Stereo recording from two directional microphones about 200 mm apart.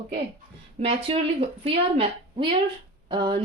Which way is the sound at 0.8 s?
30° right (ahead or behind).